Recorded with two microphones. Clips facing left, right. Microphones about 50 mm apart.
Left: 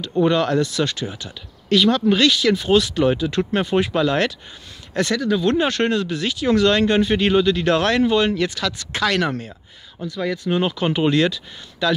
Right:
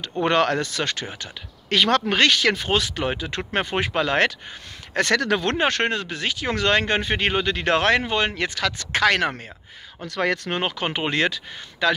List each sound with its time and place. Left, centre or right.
0.2 s speech: right
1.9 s speech: right
2.1 s speech: right
5.1 s speech: right
5.4 s speech: right
10.0 s speech: right
10.5 s speech: right